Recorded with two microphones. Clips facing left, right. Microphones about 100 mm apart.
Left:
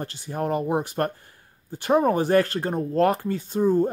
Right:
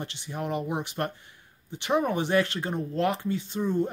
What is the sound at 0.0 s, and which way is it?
Speech, 40° left (ahead or behind).